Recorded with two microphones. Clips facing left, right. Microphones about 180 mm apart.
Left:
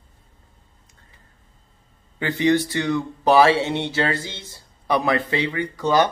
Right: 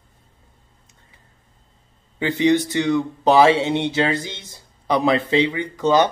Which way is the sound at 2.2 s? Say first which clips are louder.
Right 2 dB; 15° right (ahead or behind).